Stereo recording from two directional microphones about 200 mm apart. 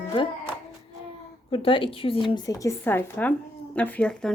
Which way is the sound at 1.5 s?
25° left (ahead or behind).